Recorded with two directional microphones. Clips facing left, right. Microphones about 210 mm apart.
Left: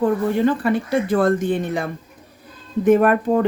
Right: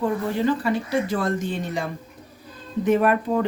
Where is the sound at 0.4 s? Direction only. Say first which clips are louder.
Left 4 dB; 55° left (ahead or behind).